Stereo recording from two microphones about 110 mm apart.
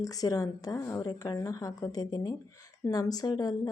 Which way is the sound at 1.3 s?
30° left (ahead or behind).